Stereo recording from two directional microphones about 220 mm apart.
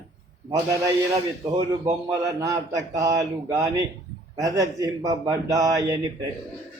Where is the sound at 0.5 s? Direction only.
15° right (ahead or behind).